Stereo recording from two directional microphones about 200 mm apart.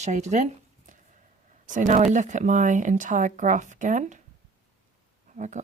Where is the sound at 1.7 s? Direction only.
40° right (ahead or behind).